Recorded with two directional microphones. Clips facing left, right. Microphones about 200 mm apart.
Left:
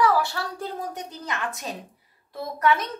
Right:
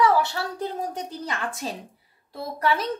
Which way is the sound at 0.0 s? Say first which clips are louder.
Right 1 dB; 25° right (ahead or behind).